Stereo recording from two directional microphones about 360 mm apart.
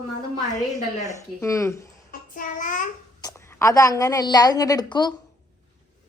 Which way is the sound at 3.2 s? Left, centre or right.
Centre.